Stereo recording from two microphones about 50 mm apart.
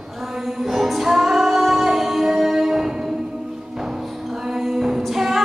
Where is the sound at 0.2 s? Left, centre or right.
Centre.